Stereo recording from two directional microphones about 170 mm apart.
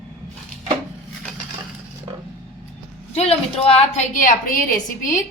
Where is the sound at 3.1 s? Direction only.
35° left (ahead or behind).